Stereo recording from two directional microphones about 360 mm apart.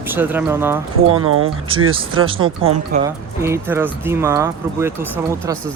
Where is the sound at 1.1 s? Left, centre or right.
Right.